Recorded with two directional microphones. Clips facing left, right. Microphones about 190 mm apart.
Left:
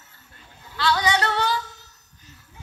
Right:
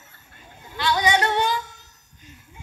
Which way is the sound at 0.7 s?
20° right (ahead or behind).